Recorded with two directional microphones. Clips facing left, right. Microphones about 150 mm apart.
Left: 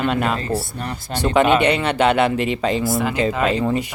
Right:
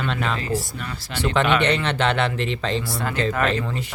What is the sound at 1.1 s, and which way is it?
Speech, 40° left (ahead or behind).